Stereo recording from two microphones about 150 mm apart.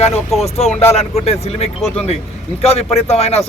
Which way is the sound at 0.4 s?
45° left (ahead or behind).